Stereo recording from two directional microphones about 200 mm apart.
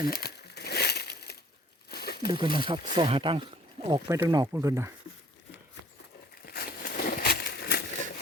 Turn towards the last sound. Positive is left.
turn(degrees=55)  # may be behind; listen again after turning